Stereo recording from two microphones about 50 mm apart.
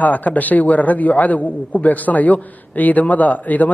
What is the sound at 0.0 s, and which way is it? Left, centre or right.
A man's voice, left.